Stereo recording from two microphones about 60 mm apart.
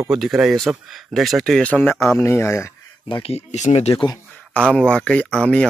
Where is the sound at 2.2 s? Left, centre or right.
Left.